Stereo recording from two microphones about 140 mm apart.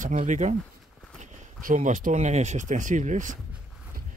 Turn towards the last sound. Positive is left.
turn(degrees=-65)  # may be behind; listen again after turning